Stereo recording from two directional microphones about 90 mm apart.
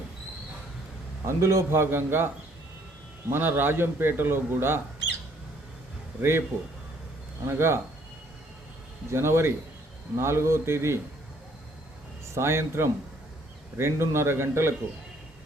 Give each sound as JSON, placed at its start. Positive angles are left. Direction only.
{"t": 1.2, "sound": "a man's voice", "side_deg": -30}
{"t": 6.5, "sound": "a man's voice", "side_deg": -30}
{"t": 9.0, "sound": "a man's voice", "side_deg": -30}
{"t": 12.3, "sound": "a man's voice", "side_deg": -30}